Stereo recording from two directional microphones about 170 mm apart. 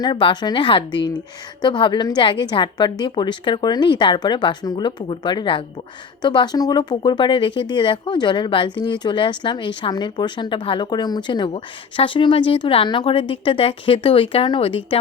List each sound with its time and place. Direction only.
0.0 s speech: 30° left (ahead or behind)